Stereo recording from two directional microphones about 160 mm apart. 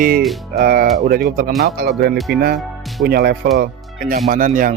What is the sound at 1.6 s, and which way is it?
Speech, 80° right.